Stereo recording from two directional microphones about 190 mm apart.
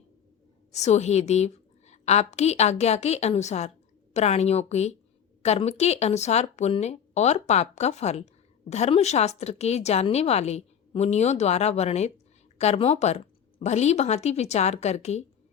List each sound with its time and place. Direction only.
0.7 s speech: 35° left (ahead or behind)